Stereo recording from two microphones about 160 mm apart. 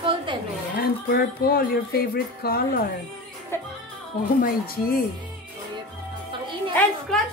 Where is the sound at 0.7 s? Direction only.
70° left (ahead or behind).